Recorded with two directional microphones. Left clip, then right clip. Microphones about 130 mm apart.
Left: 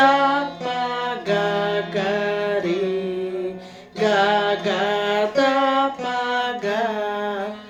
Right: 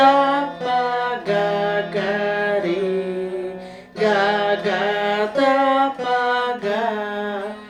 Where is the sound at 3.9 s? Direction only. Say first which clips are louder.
Even; 25° left (ahead or behind).